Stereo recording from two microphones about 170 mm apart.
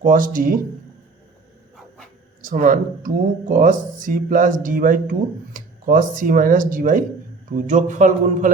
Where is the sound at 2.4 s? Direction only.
50° right (ahead or behind).